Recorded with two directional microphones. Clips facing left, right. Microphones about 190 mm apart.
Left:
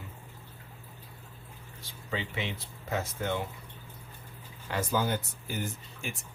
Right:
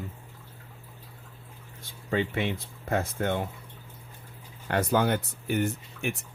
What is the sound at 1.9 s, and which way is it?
Speech, 50° right (ahead or behind).